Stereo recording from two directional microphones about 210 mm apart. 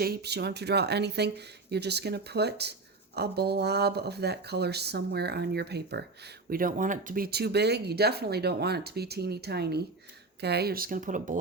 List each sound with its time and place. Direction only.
0.0 s speech: 50° right (ahead or behind)